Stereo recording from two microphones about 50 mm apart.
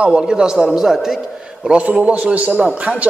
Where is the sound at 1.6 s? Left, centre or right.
Right.